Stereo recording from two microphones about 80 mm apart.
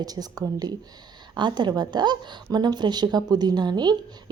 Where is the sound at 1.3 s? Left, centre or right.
Right.